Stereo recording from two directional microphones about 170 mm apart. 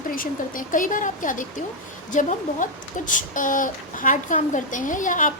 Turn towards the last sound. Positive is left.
turn(degrees=50)  # may be behind; listen again after turning